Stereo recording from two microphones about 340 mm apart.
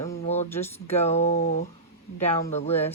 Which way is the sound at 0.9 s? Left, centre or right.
Centre.